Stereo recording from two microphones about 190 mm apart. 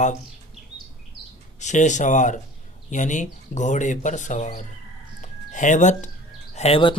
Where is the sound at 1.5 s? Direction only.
40° left (ahead or behind).